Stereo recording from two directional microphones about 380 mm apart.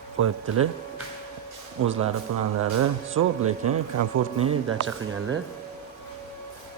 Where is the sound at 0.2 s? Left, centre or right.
Right.